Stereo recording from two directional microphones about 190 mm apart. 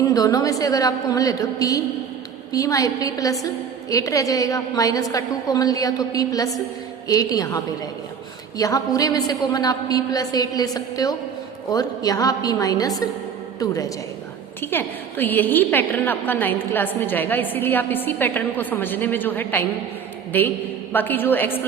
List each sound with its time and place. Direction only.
0.0 s a woman's voice: 20° left (ahead or behind)
14.6 s a woman's voice: 10° left (ahead or behind)
20.9 s a woman's voice: 10° left (ahead or behind)